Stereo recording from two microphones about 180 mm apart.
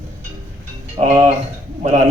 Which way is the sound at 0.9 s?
40° right (ahead or behind).